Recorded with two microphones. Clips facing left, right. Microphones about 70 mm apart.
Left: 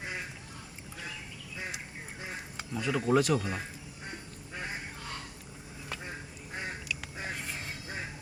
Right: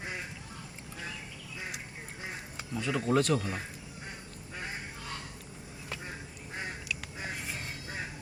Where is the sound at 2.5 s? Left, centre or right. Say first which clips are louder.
Left 1 dB; centre.